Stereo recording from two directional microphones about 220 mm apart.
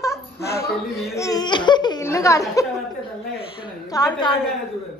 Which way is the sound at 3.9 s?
20° left (ahead or behind).